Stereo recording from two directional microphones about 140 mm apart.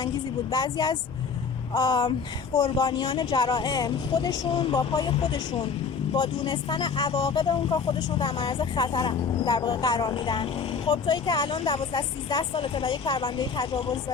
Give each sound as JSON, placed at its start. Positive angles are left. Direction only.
{"t": 0.5, "sound": "speech", "side_deg": 30}